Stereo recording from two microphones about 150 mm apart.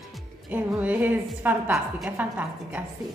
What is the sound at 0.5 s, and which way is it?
Speech, 10° right (ahead or behind).